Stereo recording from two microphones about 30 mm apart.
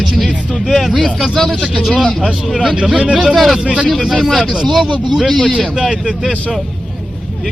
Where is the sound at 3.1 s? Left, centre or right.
Centre.